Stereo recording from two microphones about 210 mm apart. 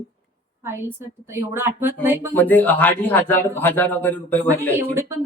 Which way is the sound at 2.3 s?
10° left (ahead or behind).